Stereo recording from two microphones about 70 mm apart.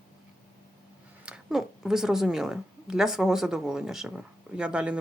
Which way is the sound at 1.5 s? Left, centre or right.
Centre.